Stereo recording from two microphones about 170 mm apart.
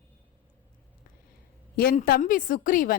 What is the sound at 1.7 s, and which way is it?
A woman's voice, 60° left (ahead or behind).